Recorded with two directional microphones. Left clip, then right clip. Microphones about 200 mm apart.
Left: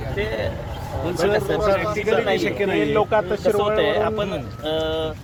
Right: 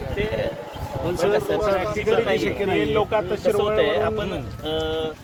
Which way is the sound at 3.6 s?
20° left (ahead or behind).